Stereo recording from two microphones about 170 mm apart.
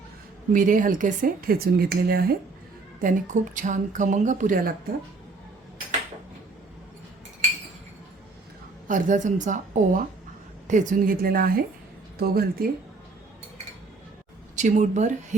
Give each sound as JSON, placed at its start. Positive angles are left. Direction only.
{"t": 0.5, "sound": "speech", "side_deg": -50}
{"t": 3.0, "sound": "speech", "side_deg": -50}
{"t": 8.9, "sound": "speech", "side_deg": -50}
{"t": 14.5, "sound": "speech", "side_deg": -45}